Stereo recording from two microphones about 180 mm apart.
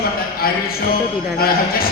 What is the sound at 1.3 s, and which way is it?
Speech, 55° left (ahead or behind).